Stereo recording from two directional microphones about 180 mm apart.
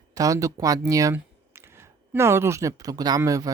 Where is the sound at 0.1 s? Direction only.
20° right (ahead or behind).